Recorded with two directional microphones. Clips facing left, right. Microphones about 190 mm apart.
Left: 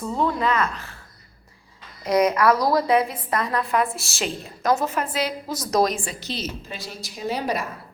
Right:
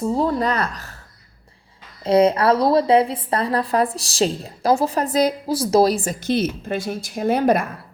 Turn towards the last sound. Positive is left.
turn(degrees=-50)  # may be behind; listen again after turning